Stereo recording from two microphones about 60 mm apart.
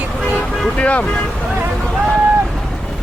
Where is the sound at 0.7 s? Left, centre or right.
Centre.